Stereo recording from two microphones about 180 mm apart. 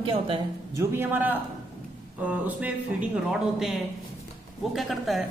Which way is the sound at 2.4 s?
5° right (ahead or behind).